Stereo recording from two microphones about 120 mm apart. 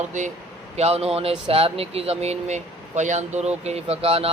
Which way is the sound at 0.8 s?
60° right (ahead or behind).